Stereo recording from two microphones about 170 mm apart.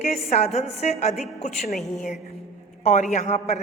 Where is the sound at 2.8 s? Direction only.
45° left (ahead or behind).